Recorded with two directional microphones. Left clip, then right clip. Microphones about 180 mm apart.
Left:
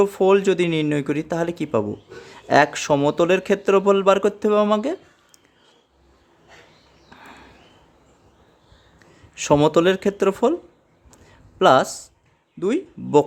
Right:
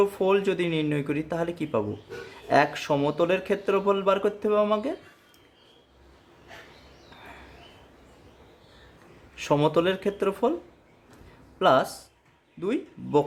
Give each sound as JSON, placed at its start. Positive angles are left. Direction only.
{"t": 0.0, "sound": "speech", "side_deg": 40}
{"t": 9.3, "sound": "speech", "side_deg": 40}
{"t": 11.6, "sound": "speech", "side_deg": 40}